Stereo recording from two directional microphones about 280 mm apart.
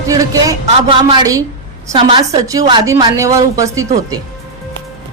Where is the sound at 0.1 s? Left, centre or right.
Centre.